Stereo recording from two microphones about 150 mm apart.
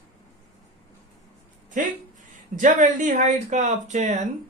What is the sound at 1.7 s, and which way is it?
Speech, 60° right (ahead or behind).